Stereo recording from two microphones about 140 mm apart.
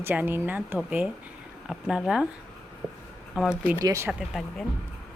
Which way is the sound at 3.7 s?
20° right (ahead or behind).